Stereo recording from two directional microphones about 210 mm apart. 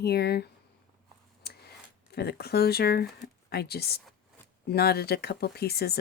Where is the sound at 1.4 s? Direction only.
50° left (ahead or behind).